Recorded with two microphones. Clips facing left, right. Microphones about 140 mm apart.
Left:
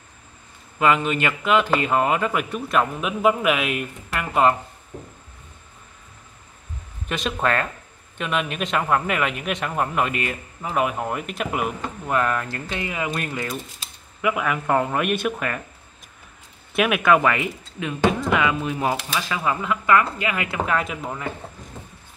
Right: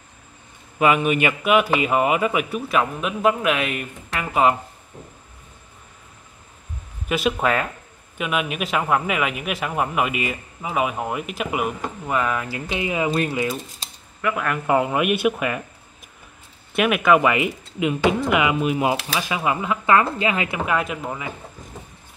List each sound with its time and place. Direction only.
0.7 s a man's voice: 15° right (ahead or behind)
7.1 s a man's voice: 5° right (ahead or behind); by 13.3 s 20° right (ahead or behind)
13.3 s a man's voice: 10° right (ahead or behind)
14.2 s a man's voice: 5° left (ahead or behind)
16.7 s a man's voice: centre (ahead or behind); by 20.4 s 25° right (ahead or behind)
20.5 s a man's voice: 5° right (ahead or behind)